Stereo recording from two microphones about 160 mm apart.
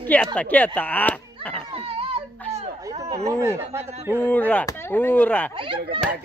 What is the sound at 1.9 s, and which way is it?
Baby cry, 35° right (ahead or behind).